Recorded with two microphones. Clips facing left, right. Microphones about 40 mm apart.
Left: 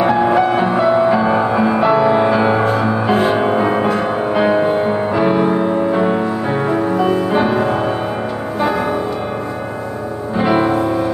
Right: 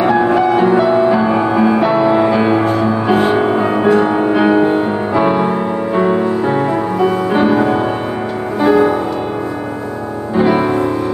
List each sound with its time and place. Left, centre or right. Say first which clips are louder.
0.0 s music: right 1 dB; centre
10.3 s music: right 2 dB; centre